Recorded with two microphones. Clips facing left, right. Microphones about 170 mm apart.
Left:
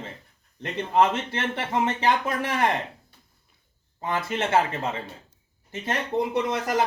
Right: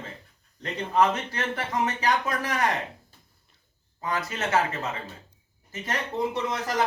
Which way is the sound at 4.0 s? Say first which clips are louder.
Left 3 dB; 25° left (ahead or behind).